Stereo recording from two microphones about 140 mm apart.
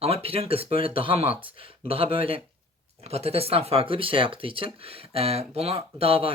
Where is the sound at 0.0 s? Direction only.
45° right (ahead or behind).